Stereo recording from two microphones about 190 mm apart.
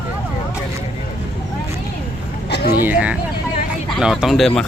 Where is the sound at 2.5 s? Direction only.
55° left (ahead or behind).